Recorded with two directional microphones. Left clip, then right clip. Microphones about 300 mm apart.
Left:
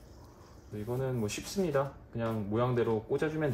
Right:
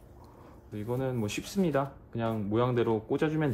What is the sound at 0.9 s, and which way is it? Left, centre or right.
Speech, right.